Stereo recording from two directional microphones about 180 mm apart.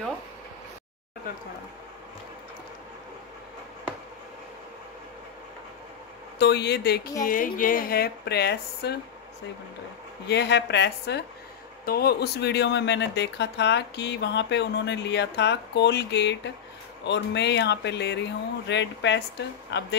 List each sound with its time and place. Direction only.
6.3 s speech: 65° left (ahead or behind)
7.2 s speech: 50° left (ahead or behind)
10.2 s speech: 70° left (ahead or behind)